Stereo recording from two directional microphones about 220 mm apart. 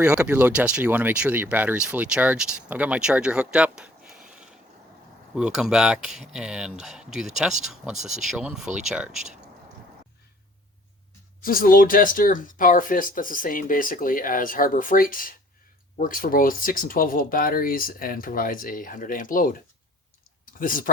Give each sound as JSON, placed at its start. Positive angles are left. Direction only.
{"t": 0.0, "sound": "speech", "side_deg": -5}
{"t": 11.4, "sound": "speech", "side_deg": 40}